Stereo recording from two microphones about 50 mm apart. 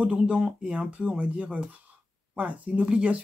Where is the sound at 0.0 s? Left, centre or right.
Centre.